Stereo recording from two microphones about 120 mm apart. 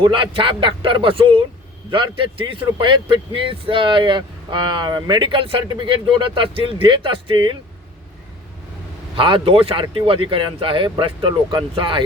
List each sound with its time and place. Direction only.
0.0 s speech: 45° right (ahead or behind)
9.1 s speech: 45° right (ahead or behind)
9.8 s speech: 30° right (ahead or behind)
10.1 s speech: 45° right (ahead or behind)